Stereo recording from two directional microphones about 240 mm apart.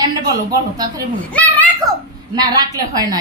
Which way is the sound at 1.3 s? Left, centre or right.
Centre.